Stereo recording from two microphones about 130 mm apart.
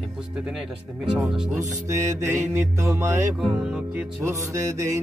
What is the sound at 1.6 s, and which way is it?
Mantra, 20° right (ahead or behind).